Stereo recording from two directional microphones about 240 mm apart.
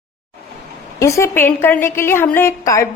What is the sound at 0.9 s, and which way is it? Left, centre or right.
A woman's voice, centre.